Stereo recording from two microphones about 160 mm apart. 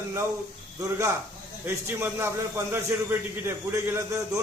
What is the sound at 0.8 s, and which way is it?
Speech, 20° right (ahead or behind).